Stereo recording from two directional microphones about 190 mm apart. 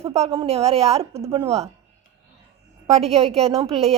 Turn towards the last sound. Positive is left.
turn(degrees=-30)  # may be behind; listen again after turning